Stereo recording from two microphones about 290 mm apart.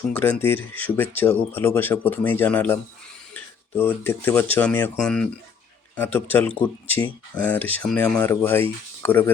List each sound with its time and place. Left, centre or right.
0.1 s speech: centre
3.8 s speech: centre
6.8 s speech: centre
7.3 s speech: centre